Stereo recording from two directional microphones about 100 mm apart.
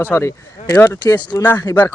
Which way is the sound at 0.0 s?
25° left (ahead or behind).